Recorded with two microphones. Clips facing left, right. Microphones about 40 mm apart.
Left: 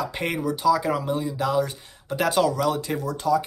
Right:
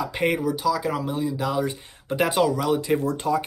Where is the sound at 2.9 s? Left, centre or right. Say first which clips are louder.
Right 1 dB; right.